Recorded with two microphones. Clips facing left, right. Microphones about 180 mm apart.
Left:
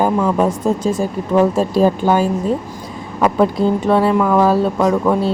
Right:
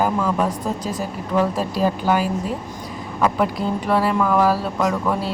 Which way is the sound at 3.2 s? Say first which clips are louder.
Left 6 dB; 25° left (ahead or behind).